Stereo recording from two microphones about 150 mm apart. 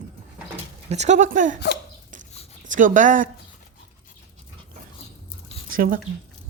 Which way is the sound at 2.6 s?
60° right (ahead or behind).